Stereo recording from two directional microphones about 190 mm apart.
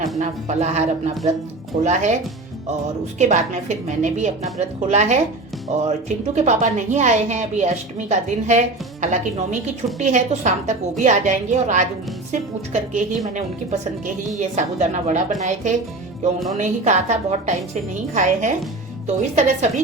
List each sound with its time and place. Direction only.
0.2 s a woman's voice: 35° right (ahead or behind)
3.2 s a woman's voice: 40° right (ahead or behind)
14.3 s a woman's voice: 35° right (ahead or behind)